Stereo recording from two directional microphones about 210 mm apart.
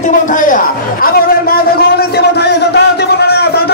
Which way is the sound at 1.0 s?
45° left (ahead or behind).